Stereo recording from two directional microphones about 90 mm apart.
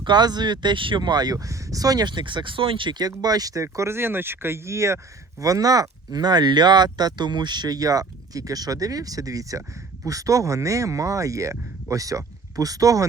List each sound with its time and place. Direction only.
0.0 s speech: 55° right (ahead or behind)
3.2 s speech: 45° right (ahead or behind)